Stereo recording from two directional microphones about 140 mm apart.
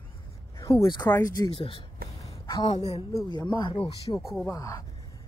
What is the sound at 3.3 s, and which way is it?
Speech, 30° left (ahead or behind).